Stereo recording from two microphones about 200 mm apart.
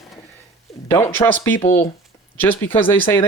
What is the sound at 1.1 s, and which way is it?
Speech, 10° left (ahead or behind).